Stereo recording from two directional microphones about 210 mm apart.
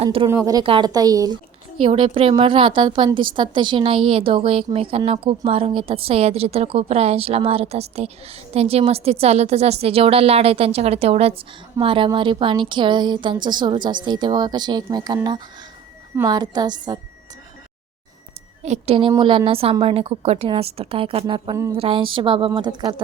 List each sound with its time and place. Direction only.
0.0 s a woman's voice: 25° right (ahead or behind)
0.3 s a woman's voice: 15° right (ahead or behind)
18.6 s a woman's voice: 30° right (ahead or behind)